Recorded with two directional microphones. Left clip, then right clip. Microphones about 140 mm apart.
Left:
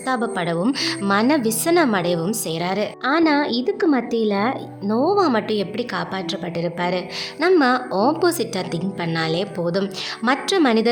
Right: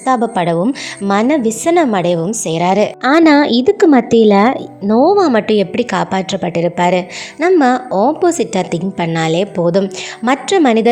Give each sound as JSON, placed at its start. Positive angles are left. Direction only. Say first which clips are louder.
{"t": 0.0, "sound": "a woman's voice", "louder": "right 9 dB", "side_deg": -40}